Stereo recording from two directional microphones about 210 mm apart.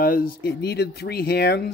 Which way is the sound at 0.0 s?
45° left (ahead or behind).